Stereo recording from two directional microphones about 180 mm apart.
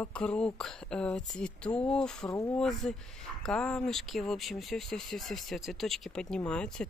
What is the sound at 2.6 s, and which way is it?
Speech, centre (ahead or behind).